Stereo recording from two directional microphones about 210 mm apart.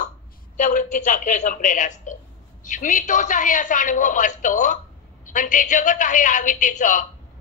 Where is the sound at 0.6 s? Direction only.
35° left (ahead or behind).